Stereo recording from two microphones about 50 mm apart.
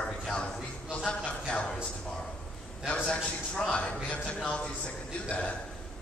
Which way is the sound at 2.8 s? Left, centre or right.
Left.